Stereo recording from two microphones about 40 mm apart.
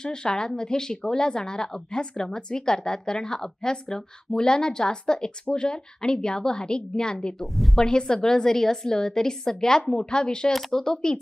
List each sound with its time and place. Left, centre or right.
0.0 s speech: centre
7.5 s speech: centre
7.8 s speech: centre
10.5 s speech: centre
10.8 s speech: centre